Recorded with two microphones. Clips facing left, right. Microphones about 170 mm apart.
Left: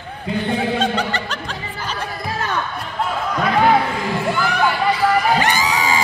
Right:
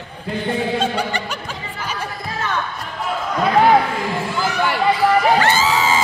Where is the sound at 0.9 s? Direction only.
10° right (ahead or behind).